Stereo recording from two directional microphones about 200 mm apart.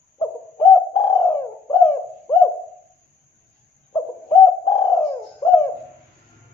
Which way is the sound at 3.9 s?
15° left (ahead or behind).